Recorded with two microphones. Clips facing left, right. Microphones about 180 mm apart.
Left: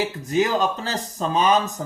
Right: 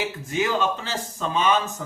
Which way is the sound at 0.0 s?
40° left (ahead or behind).